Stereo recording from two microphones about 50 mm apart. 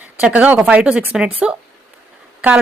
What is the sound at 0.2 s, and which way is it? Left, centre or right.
A woman's voice, right.